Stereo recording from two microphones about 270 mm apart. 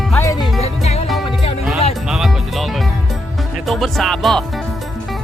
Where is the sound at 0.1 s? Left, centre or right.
Centre.